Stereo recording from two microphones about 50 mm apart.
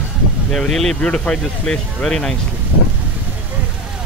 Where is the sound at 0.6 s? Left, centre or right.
Centre.